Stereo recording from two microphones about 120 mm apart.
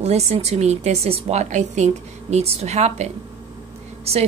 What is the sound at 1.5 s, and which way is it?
A woman's voice, 75° right (ahead or behind).